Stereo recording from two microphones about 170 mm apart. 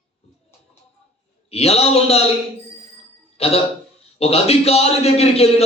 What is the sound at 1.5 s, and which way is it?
Speech, 35° left (ahead or behind).